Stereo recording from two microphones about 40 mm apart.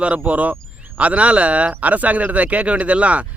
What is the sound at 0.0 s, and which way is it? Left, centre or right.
Speech, right.